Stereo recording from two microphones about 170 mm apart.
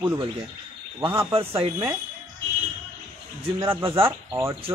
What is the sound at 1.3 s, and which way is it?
Speech, 35° right (ahead or behind).